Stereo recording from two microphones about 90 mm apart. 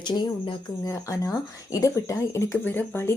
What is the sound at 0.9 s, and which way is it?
Speech, 35° left (ahead or behind).